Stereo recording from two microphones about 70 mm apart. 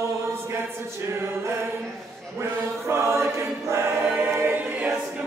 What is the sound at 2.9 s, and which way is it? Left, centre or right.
Choir, right.